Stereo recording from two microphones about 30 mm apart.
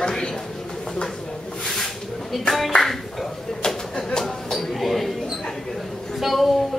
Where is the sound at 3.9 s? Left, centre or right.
Left.